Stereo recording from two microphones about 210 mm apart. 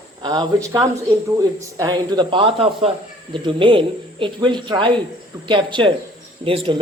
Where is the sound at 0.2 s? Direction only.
20° right (ahead or behind).